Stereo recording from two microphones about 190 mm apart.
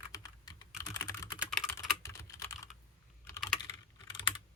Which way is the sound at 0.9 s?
15° left (ahead or behind).